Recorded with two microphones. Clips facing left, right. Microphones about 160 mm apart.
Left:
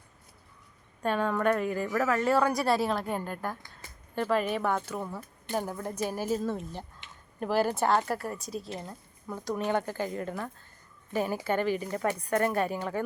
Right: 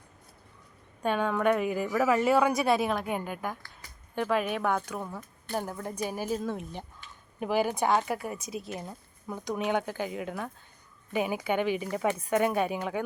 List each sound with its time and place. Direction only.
1.0 s speech: centre (ahead or behind)
6.1 s speech: 10° right (ahead or behind)
12.3 s speech: centre (ahead or behind)